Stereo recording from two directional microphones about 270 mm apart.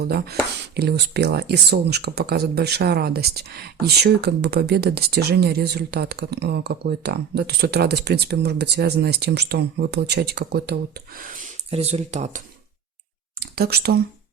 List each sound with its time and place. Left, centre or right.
0.0 s speech: right
13.6 s speech: right